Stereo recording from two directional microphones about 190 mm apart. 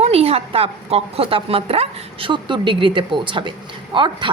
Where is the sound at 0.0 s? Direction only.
30° right (ahead or behind).